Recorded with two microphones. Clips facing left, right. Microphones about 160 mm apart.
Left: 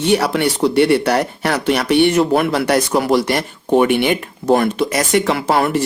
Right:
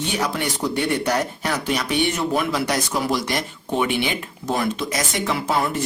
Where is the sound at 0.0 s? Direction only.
70° left (ahead or behind).